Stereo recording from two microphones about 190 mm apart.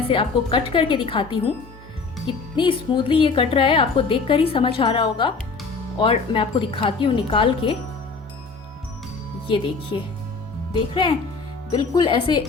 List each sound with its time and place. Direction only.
0.1 s a woman's voice: 25° left (ahead or behind)
10.7 s a woman's voice: 25° left (ahead or behind)